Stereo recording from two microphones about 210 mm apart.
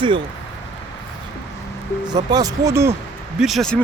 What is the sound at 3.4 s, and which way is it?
Speech, centre (ahead or behind).